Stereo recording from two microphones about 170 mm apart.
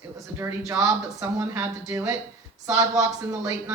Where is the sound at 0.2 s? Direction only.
15° right (ahead or behind).